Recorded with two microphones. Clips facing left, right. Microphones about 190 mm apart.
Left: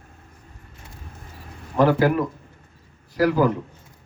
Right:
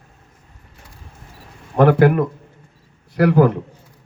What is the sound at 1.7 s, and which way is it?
A man's voice, 60° right (ahead or behind).